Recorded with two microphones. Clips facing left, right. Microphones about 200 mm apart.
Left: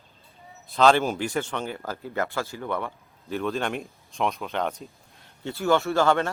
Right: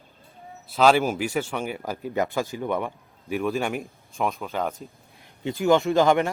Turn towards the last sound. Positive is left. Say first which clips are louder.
# right 3 dB
turn(degrees=-15)  # may be behind; listen again after turning